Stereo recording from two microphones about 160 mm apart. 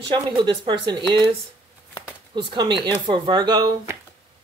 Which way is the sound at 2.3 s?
30° right (ahead or behind).